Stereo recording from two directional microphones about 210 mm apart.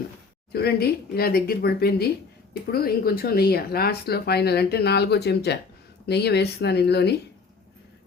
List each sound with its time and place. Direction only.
0.5 s speech: 50° left (ahead or behind)